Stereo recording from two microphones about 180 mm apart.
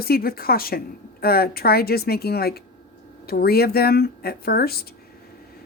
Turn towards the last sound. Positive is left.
turn(degrees=60)  # may be behind; listen again after turning